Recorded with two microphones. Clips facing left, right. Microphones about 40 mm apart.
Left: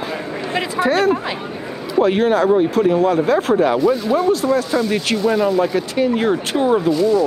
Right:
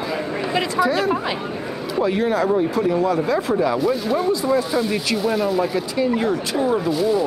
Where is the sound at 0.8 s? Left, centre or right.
Left.